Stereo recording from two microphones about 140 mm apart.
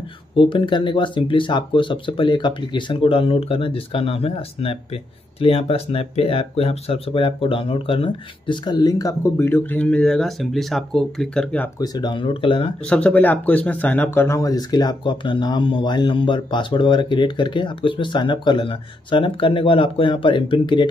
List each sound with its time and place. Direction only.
0.4 s speech: 35° left (ahead or behind); by 11.7 s 10° left (ahead or behind)
11.8 s speech: 30° left (ahead or behind)
12.8 s speech: 10° left (ahead or behind); by 20.9 s 35° left (ahead or behind)